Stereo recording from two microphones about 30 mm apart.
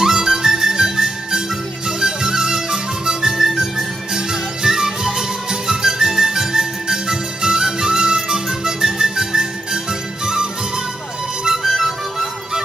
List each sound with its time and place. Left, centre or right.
0.0 s harmonica: centre
1.9 s music: centre
11.6 s music: centre